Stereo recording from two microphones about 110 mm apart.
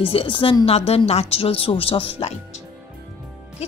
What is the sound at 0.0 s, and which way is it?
A woman's voice, 55° left (ahead or behind).